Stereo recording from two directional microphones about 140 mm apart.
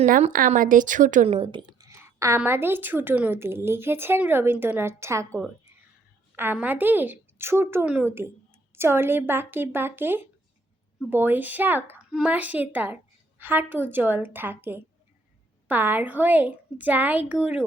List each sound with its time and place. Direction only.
0.3 s speech: 80° right
1.3 s a woman's voice: 40° right (ahead or behind)
1.9 s a sound: 20° right (ahead or behind)
2.4 s a woman's voice: 15° right (ahead or behind)